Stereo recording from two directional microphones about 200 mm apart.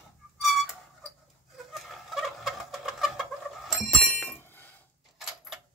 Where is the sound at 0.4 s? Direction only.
Centre (ahead or behind).